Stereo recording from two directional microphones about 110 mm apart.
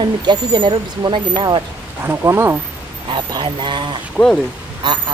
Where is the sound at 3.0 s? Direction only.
45° right (ahead or behind).